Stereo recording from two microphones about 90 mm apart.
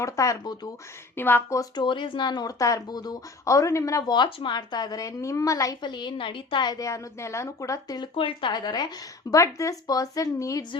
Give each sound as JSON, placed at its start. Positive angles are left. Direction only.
{"t": 0.0, "sound": "a woman's voice", "side_deg": 35}
{"t": 1.1, "sound": "speech", "side_deg": 25}
{"t": 1.7, "sound": "speech", "side_deg": 65}
{"t": 4.1, "sound": "a woman's voice", "side_deg": 60}
{"t": 5.8, "sound": "a woman's voice", "side_deg": 55}
{"t": 6.7, "sound": "a woman's voice", "side_deg": 35}
{"t": 8.1, "sound": "a woman's voice", "side_deg": 75}
{"t": 9.3, "sound": "a woman's voice", "side_deg": 35}